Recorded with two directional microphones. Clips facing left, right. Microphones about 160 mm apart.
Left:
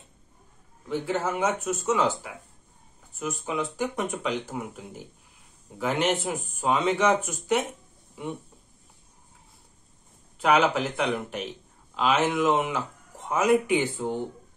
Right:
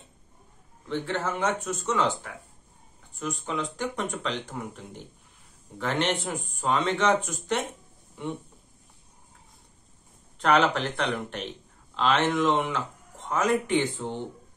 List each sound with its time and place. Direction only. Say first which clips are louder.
0.8 s speech: left 2 dB; 10° left (ahead or behind)
10.4 s a man's voice: left 1 dB; 5° left (ahead or behind)